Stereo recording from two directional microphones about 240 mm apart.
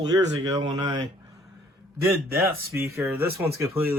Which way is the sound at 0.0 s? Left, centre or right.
Centre.